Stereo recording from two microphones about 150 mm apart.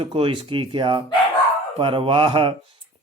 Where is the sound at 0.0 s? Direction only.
35° right (ahead or behind).